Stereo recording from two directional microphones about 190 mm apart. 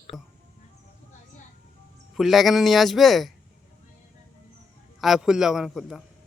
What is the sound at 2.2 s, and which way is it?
Speech, centre (ahead or behind).